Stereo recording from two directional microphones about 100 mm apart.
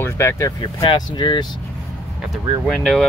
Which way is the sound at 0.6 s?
45° left (ahead or behind).